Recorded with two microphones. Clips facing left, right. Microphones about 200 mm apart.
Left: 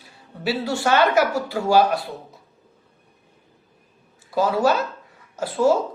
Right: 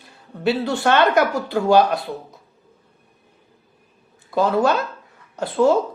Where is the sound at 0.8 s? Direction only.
5° left (ahead or behind).